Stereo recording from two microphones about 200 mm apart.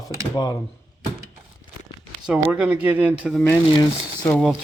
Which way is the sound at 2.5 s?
5° right (ahead or behind).